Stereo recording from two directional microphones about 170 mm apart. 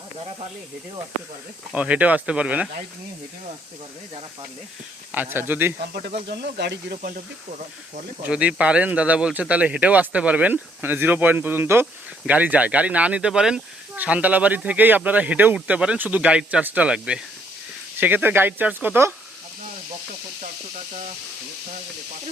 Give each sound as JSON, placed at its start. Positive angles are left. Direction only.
{"t": 1.7, "sound": "speech", "side_deg": -5}
{"t": 5.1, "sound": "speech", "side_deg": -10}
{"t": 6.2, "sound": "speech", "side_deg": -75}
{"t": 8.2, "sound": "speech", "side_deg": -5}